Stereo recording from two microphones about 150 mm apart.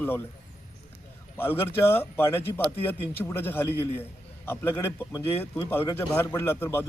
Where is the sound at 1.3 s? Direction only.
15° left (ahead or behind).